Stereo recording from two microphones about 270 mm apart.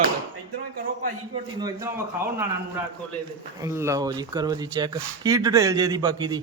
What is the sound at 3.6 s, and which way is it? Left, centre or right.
Speech, centre.